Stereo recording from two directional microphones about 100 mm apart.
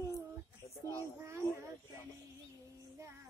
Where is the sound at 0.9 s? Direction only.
25° right (ahead or behind).